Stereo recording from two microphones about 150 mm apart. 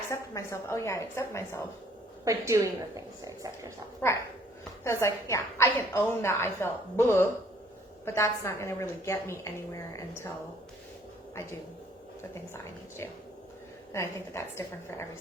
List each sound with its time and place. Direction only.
0.1 s a woman's voice: 20° left (ahead or behind)
2.2 s a woman's voice: 20° right (ahead or behind)
4.0 s a woman's voice: 15° left (ahead or behind)
13.9 s a woman's voice: 20° left (ahead or behind)